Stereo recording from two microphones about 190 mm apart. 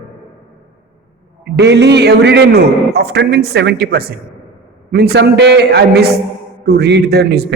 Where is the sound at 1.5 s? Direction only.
60° right (ahead or behind).